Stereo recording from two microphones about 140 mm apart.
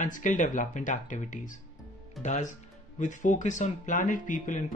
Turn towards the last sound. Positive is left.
turn(degrees=65)  # may be behind; listen again after turning